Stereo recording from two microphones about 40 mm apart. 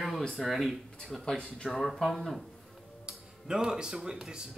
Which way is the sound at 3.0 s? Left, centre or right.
Centre.